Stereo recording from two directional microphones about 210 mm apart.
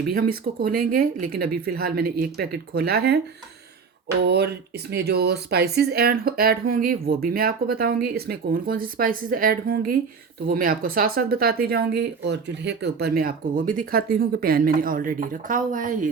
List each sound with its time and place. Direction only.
0.1 s speech: 45° right (ahead or behind)
4.3 s speech: 50° right (ahead or behind)